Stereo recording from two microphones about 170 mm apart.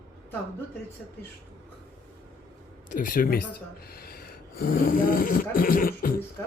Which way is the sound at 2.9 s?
55° left (ahead or behind).